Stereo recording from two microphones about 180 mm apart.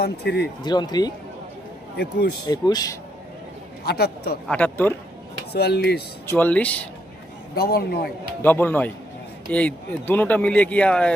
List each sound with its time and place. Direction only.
0.0 s speech: 65° left (ahead or behind)
0.6 s speech: 25° left (ahead or behind)
2.0 s speech: 70° left (ahead or behind)
2.5 s speech: 20° left (ahead or behind)
3.8 s speech: 65° left (ahead or behind)
4.4 s speech: 10° left (ahead or behind)
5.5 s speech: 65° left (ahead or behind)
6.2 s speech: 10° left (ahead or behind)
7.5 s speech: 60° left (ahead or behind)
8.4 s speech: 10° left (ahead or behind)